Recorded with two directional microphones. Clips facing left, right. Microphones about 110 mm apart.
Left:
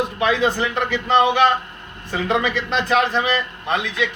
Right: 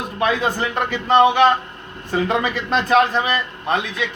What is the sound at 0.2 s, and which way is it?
A man's voice, 45° right (ahead or behind).